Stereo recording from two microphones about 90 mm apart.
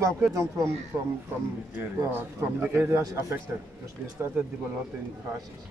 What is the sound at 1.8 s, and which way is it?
Speech, 25° right (ahead or behind).